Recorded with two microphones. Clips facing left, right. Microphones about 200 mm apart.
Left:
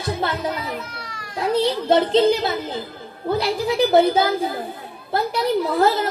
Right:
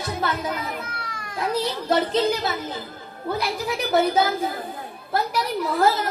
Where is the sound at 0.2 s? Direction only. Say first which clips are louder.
Right 1 dB; 30° left (ahead or behind).